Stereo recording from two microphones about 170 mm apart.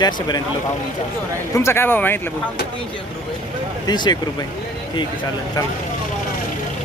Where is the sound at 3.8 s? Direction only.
25° left (ahead or behind).